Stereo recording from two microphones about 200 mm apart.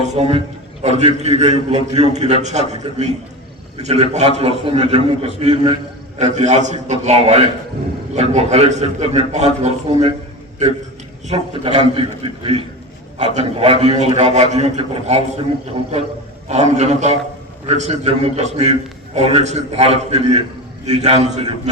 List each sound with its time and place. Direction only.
0.0 s a man's voice: 30° right (ahead or behind)
11.3 s a man's voice: 30° right (ahead or behind)
16.5 s a man's voice: 35° right (ahead or behind)